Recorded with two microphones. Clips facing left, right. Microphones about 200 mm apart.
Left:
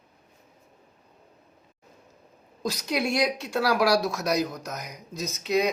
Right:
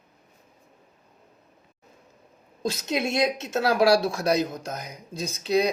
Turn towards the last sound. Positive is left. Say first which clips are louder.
# right 2 dB
turn(degrees=-35)  # may be behind; listen again after turning